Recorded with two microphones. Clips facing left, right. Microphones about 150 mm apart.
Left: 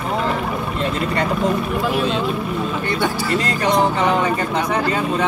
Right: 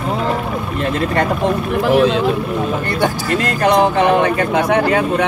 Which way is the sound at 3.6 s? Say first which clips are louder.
Right 5 dB; 65° right (ahead or behind).